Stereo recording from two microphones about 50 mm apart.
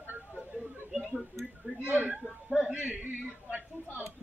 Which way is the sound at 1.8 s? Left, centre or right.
Right.